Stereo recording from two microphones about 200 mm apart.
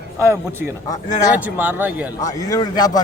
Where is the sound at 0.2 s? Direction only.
15° right (ahead or behind).